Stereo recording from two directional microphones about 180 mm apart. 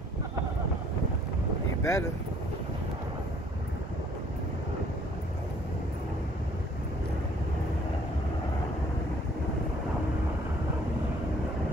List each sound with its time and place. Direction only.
1.8 s speech: 15° left (ahead or behind)